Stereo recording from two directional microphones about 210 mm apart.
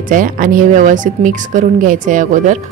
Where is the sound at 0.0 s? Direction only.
40° right (ahead or behind).